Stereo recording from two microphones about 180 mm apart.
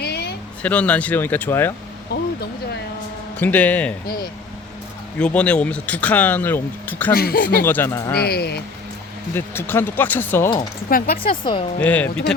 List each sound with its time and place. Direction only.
0.0 s a sound: 65° left (ahead or behind)
0.6 s speech: 5° left (ahead or behind)
2.1 s vehicle: 65° left (ahead or behind)
3.3 s speech: 10° left (ahead or behind)
5.2 s speech: 5° left (ahead or behind)
7.1 s speech: 55° left (ahead or behind)
7.6 s speech: 10° left (ahead or behind)
8.2 s speech: 60° left (ahead or behind)
9.3 s speech: 10° left (ahead or behind)
10.8 s speech: 55° left (ahead or behind)
11.2 s speech: 30° left (ahead or behind)
11.8 s speech: 10° left (ahead or behind)